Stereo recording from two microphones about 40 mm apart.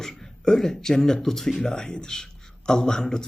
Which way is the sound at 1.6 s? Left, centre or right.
Centre.